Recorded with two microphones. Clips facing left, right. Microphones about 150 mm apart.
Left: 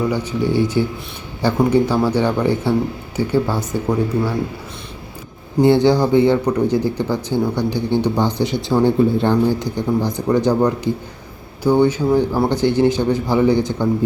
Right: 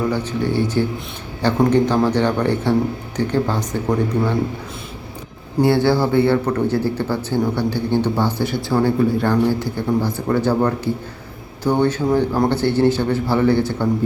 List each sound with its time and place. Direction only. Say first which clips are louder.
0.1 s a man's voice: left 2 dB; 10° left (ahead or behind)
5.6 s a man's voice: left 3 dB; 20° left (ahead or behind)